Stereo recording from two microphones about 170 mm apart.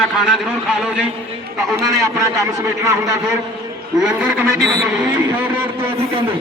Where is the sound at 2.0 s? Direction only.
20° right (ahead or behind).